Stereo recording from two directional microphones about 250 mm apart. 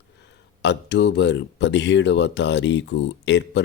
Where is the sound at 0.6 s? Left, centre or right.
Left.